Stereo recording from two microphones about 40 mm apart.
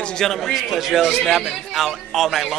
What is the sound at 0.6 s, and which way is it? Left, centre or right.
A man's voice, centre.